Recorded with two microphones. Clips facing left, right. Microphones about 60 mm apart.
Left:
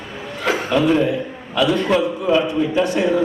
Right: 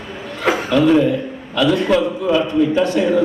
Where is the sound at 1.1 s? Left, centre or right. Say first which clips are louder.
Right 2 dB; centre.